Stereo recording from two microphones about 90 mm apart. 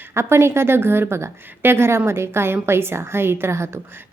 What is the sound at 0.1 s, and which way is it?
A woman's voice, 30° right (ahead or behind).